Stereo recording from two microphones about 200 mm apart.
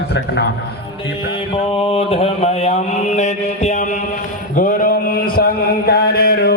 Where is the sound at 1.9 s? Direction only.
30° left (ahead or behind).